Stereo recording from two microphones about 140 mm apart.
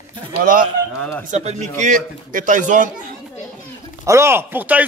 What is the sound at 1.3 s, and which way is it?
Speech, 55° right (ahead or behind).